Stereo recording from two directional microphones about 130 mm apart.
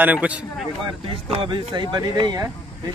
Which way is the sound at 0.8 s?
40° right (ahead or behind).